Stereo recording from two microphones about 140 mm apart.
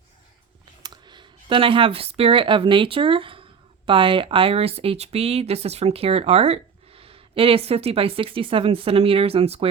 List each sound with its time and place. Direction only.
0.8 s speech: 30° right (ahead or behind)